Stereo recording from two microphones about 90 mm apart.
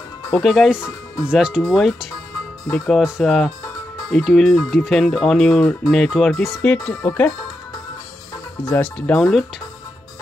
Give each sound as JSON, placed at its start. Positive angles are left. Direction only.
{"t": 0.3, "sound": "speech", "side_deg": 0}
{"t": 0.7, "sound": "speech", "side_deg": 30}
{"t": 1.2, "sound": "speech", "side_deg": -10}
{"t": 6.6, "sound": "speech", "side_deg": 15}
{"t": 8.8, "sound": "speech", "side_deg": 10}